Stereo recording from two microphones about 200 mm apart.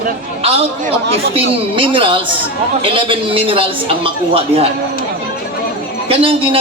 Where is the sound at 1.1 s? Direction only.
30° right (ahead or behind).